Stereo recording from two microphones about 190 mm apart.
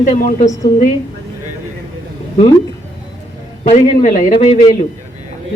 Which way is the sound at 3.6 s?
35° left (ahead or behind).